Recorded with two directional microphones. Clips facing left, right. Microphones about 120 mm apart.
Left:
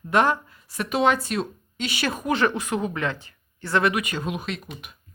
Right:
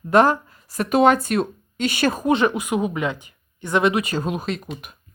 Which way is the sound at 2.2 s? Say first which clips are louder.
Right 1 dB; 20° right (ahead or behind).